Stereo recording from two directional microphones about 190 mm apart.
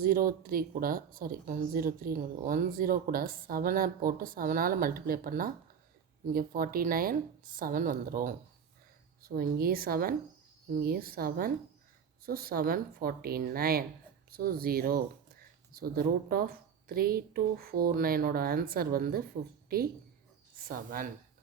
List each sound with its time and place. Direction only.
0.0 s speech: 50° right (ahead or behind)